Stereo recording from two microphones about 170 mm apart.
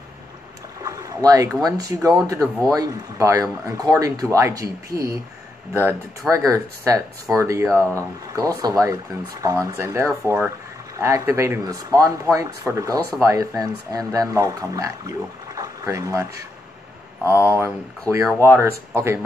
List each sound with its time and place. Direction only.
0.8 s speech: 20° right (ahead or behind)
17.3 s speech: 15° right (ahead or behind)